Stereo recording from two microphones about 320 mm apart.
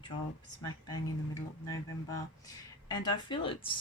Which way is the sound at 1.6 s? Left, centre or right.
Centre.